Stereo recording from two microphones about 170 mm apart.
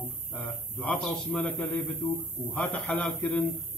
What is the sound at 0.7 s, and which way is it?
Mantra, 5° left (ahead or behind).